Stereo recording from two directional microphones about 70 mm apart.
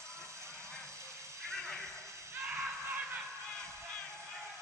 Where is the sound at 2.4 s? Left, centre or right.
Right.